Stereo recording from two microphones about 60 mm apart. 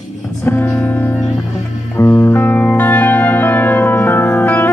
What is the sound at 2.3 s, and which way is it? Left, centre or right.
Music, left.